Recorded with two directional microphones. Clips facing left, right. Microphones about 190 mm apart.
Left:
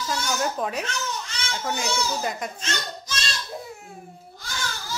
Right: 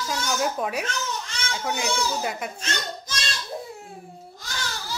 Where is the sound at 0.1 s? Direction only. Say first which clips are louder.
Even; 10° right (ahead or behind).